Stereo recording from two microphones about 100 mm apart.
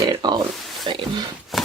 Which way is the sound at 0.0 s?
40° right (ahead or behind).